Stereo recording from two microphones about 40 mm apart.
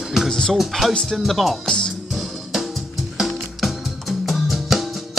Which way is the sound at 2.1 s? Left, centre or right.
Centre.